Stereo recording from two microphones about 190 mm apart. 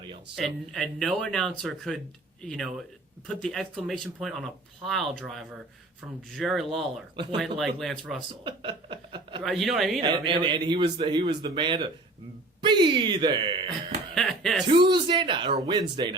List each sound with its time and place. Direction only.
0.3 s speech: centre (ahead or behind)
8.4 s chuckle: 25° right (ahead or behind)
9.4 s speech: centre (ahead or behind)
10.0 s a man's voice: 25° right (ahead or behind)
14.2 s cough: centre (ahead or behind)
14.7 s a man's voice: 25° right (ahead or behind)